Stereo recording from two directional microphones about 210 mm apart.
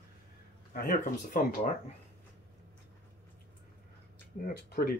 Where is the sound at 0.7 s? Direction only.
40° left (ahead or behind).